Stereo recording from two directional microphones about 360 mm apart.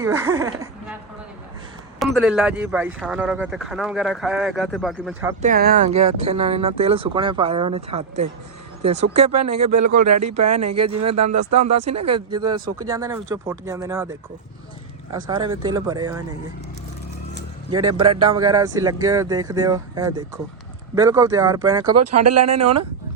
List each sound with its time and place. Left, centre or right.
0.0 s speech: centre
2.1 s speech: centre
5.4 s speech: right
9.4 s a man's voice: right
12.3 s speech: centre
17.7 s speech: centre
18.0 s a man's voice: right
18.3 s speech: centre
21.9 s a man's voice: right